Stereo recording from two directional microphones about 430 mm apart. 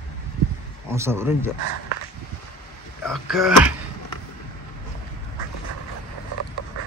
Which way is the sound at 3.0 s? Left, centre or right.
Centre.